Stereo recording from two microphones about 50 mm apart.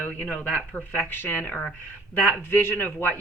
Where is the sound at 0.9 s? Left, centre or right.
Left.